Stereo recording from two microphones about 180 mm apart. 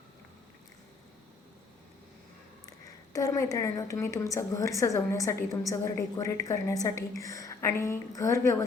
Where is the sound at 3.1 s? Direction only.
20° left (ahead or behind).